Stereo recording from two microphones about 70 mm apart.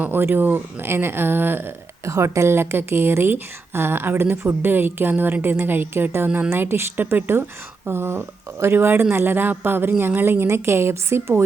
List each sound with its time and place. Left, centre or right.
0.0 s a woman's voice: right
2.0 s a woman's voice: right